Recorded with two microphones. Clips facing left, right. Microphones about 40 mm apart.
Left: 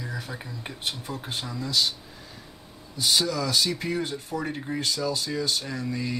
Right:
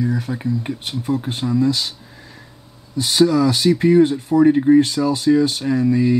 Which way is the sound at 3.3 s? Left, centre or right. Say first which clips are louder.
Right 10 dB; right.